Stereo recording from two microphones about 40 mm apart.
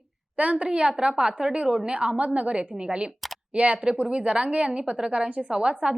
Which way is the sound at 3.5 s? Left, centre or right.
Right.